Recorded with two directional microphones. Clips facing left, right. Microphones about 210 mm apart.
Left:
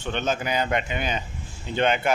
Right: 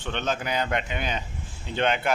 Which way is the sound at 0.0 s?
5° left (ahead or behind).